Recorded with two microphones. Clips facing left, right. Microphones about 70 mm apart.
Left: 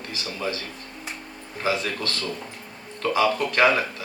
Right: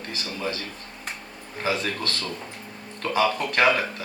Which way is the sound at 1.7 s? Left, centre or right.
Right.